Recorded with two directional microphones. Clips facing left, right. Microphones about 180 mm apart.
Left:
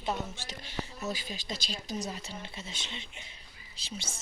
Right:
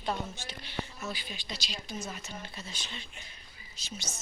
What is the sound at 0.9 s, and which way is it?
Speech, 40° left (ahead or behind).